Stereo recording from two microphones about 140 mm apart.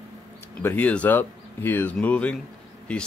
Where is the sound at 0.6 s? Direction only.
15° left (ahead or behind).